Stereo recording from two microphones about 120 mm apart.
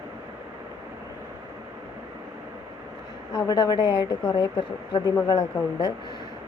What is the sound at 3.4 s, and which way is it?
Speech, 35° left (ahead or behind).